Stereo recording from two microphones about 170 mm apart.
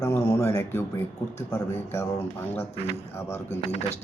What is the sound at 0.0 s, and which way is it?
Speech, 15° left (ahead or behind).